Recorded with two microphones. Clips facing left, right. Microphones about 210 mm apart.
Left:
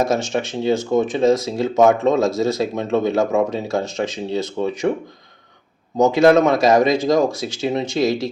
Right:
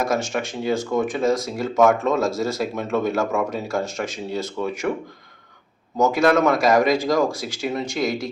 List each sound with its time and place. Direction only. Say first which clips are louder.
0.0 s speech: left 3 dB; 20° left (ahead or behind)
6.0 s speech: left 5 dB; 20° left (ahead or behind)